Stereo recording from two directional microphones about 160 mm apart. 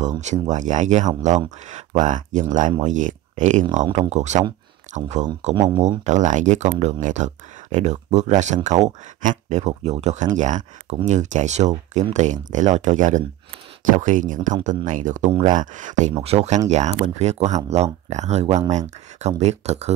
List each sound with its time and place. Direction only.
0.2 s speech: 45° right (ahead or behind)
5.5 s speech: 25° right (ahead or behind)
6.0 s speech: 50° right (ahead or behind)